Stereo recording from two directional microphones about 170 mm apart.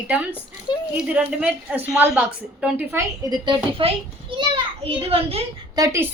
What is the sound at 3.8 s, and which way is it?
A woman's voice, 35° right (ahead or behind).